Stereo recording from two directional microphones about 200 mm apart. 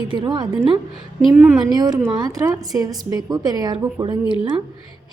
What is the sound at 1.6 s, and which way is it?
A woman's voice, 20° right (ahead or behind).